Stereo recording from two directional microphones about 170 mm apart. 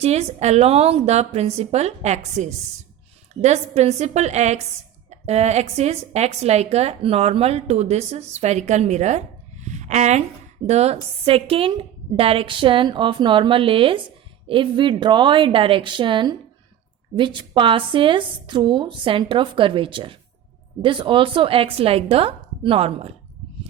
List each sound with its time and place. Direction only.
0.0 s a woman's voice: 40° right (ahead or behind)